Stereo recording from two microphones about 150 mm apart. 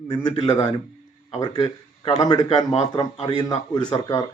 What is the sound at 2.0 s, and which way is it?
Speech, 45° left (ahead or behind).